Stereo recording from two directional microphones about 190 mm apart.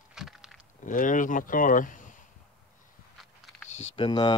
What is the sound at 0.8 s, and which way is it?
Speech, 45° left (ahead or behind).